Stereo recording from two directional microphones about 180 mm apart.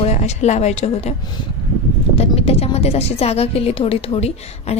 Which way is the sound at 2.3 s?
35° left (ahead or behind).